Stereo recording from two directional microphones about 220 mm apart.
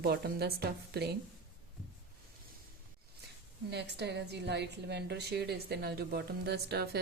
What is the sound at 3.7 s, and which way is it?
A woman's voice, 50° right (ahead or behind).